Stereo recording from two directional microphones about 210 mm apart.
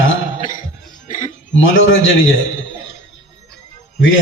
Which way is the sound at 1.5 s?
65° left (ahead or behind).